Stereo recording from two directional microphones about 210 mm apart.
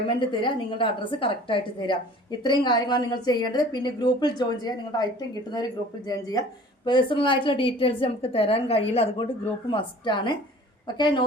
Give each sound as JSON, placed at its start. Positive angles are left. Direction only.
{"t": 0.2, "sound": "a woman's voice", "side_deg": 25}